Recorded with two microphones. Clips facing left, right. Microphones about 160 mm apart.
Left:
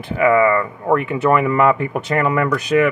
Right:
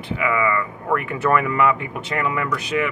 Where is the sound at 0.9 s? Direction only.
20° left (ahead or behind).